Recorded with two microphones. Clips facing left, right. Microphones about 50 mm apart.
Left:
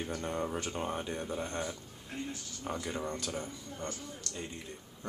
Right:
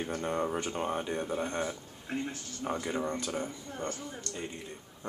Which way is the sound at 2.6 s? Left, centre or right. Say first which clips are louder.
Right 4 dB; centre.